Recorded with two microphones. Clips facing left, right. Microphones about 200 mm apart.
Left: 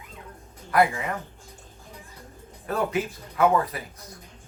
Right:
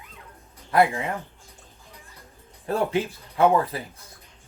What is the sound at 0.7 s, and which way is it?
Speech, 25° right (ahead or behind).